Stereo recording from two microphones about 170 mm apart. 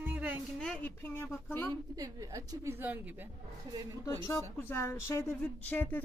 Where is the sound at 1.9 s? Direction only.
20° right (ahead or behind).